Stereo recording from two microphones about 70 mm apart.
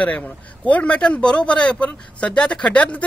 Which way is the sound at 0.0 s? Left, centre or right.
Left.